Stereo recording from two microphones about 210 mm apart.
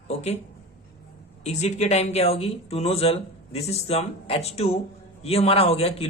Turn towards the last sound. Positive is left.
turn(degrees=30)  # may be behind; listen again after turning